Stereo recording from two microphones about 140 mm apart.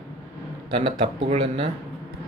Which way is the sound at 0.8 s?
45° right (ahead or behind).